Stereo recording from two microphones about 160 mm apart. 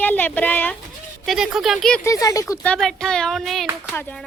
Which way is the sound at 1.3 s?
5° right (ahead or behind).